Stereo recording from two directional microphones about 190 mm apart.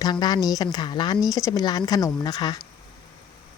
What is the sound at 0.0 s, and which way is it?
Speech, 20° left (ahead or behind).